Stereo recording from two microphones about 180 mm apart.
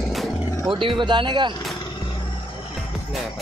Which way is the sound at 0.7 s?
30° right (ahead or behind).